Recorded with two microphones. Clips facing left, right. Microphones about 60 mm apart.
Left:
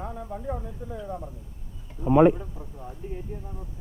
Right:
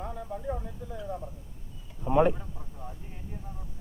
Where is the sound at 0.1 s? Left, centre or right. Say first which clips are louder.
Left 2 dB; centre.